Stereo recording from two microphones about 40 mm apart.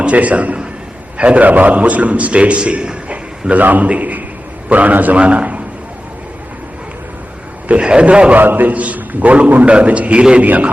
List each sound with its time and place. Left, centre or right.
0.0 s a man's voice: right
3.5 s a man's voice: right
5.2 s a man's voice: right
7.8 s a man's voice: right
8.4 s a man's voice: right
10.4 s a man's voice: right